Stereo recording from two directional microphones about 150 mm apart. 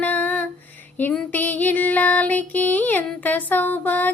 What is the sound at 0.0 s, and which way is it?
Music, 10° left (ahead or behind).